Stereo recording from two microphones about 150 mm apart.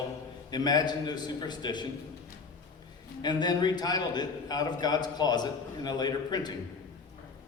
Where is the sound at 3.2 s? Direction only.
30° left (ahead or behind).